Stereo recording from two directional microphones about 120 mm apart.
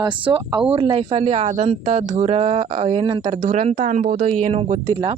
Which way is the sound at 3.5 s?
75° right (ahead or behind).